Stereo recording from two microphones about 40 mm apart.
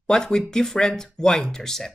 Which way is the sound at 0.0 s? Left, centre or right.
Centre.